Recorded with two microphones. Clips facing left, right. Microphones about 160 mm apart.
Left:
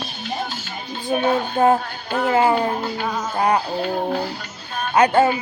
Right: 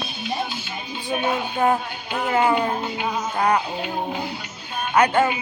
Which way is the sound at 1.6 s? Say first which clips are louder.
Left 4 dB; 45° left (ahead or behind).